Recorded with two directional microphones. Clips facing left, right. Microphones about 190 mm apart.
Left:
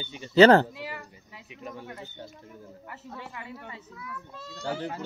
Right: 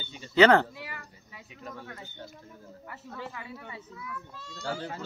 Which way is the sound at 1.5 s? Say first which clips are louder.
Left 3 dB; 15° left (ahead or behind).